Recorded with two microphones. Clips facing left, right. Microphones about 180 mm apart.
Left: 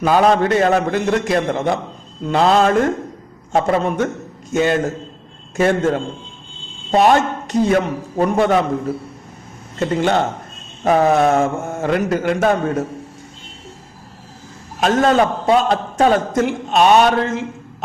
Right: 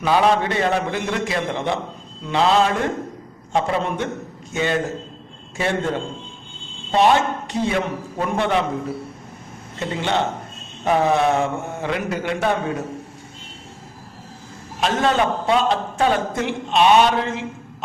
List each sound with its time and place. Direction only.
0.0 s a man's voice: 45° left (ahead or behind)
9.7 s a man's voice: 45° left (ahead or behind)
14.8 s a man's voice: 45° left (ahead or behind)